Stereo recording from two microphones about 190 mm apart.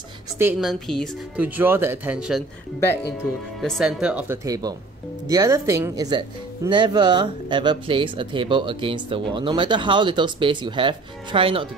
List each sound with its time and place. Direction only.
0.4 s speech: 10° right (ahead or behind)
0.7 s a woman's voice: centre (ahead or behind)
1.4 s speech: 10° right (ahead or behind)
3.6 s speech: centre (ahead or behind); by 11.7 s 30° right (ahead or behind)